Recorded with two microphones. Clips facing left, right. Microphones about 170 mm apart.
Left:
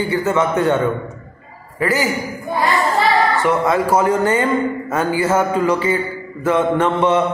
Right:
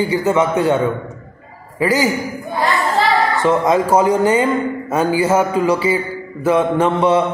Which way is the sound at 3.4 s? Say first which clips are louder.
Right 2 dB; 20° right (ahead or behind).